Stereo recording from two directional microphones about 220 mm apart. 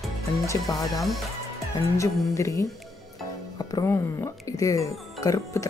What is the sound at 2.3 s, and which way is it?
Speech, 15° left (ahead or behind).